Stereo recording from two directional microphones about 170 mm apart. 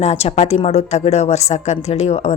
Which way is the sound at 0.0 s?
40° left (ahead or behind).